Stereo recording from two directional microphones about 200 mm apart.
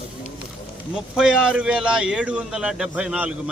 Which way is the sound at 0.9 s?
5° right (ahead or behind).